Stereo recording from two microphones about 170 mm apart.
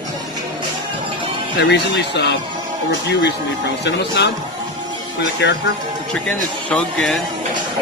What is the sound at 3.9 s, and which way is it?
Speech, 90° left.